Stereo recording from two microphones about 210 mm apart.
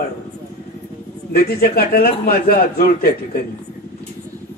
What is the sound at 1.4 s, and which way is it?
A man's voice, 45° left (ahead or behind).